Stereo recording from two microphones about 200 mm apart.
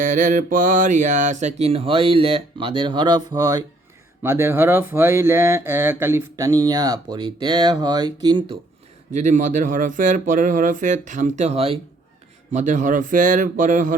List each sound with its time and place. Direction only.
0.0 s mantra: 40° right (ahead or behind); by 3.6 s 15° right (ahead or behind)
4.2 s speech: 10° right (ahead or behind)
9.1 s speech: 40° right (ahead or behind)